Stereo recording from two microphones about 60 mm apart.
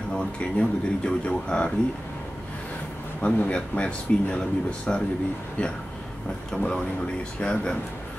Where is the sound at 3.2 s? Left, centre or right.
Left.